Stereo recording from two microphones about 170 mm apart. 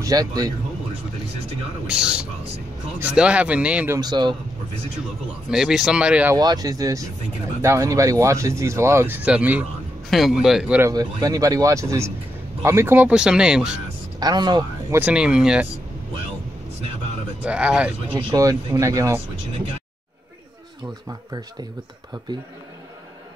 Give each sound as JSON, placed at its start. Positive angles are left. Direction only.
{"t": 0.0, "sound": "speech", "side_deg": -20}
{"t": 1.9, "sound": "speech", "side_deg": -5}
{"t": 4.0, "sound": "speech", "side_deg": -25}
{"t": 5.5, "sound": "speech", "side_deg": -5}
{"t": 6.3, "sound": "speech", "side_deg": -20}
{"t": 10.9, "sound": "speech", "side_deg": -20}
{"t": 14.2, "sound": "speech", "side_deg": -25}
{"t": 15.0, "sound": "speech", "side_deg": -5}
{"t": 17.5, "sound": "speech", "side_deg": -5}
{"t": 18.3, "sound": "speech", "side_deg": -20}